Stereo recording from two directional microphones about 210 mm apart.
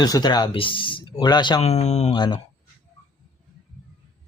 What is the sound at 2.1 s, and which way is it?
Speech, 20° left (ahead or behind).